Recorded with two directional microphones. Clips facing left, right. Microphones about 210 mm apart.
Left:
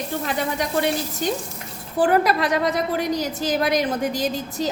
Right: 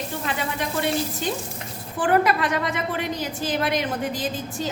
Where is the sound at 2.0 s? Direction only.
40° left (ahead or behind).